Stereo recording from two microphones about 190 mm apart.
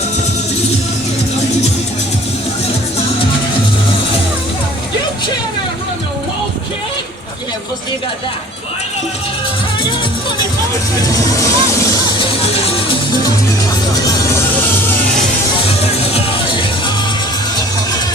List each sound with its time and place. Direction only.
11.0 s music: 20° left (ahead or behind)
13.9 s music: 20° left (ahead or behind)
15.5 s music: 30° left (ahead or behind)